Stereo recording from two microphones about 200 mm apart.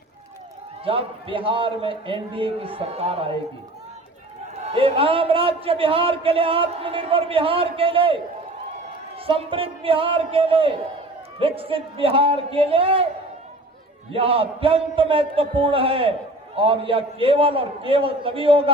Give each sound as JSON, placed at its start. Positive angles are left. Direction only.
{"t": 0.9, "sound": "a man's voice", "side_deg": -25}
{"t": 4.6, "sound": "a man's voice", "side_deg": -30}
{"t": 14.1, "sound": "a man's voice", "side_deg": -25}